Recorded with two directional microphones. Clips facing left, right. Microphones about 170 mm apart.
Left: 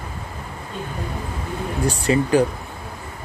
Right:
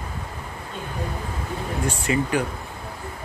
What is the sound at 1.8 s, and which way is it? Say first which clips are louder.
Speech: left 5 dB; 35° left (ahead or behind).